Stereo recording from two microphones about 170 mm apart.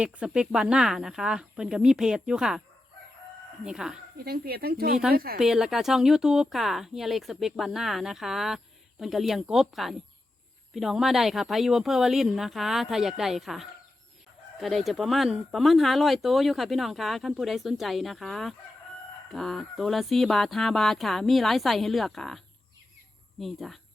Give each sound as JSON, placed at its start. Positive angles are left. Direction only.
{"t": 0.0, "sound": "speech", "side_deg": -5}
{"t": 3.6, "sound": "speech", "side_deg": -5}
{"t": 4.2, "sound": "speech", "side_deg": -65}
{"t": 5.4, "sound": "speech", "side_deg": -5}
{"t": 23.4, "sound": "speech", "side_deg": 0}